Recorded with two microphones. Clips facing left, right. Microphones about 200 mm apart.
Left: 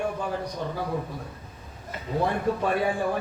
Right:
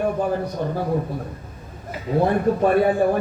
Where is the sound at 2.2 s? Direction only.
50° right (ahead or behind).